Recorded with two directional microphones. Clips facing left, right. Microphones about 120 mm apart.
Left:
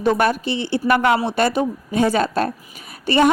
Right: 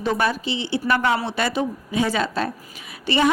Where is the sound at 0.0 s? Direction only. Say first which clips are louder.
Left 4 dB; 55° left (ahead or behind).